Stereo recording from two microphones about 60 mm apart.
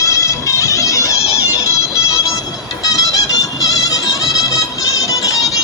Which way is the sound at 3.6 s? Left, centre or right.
Left.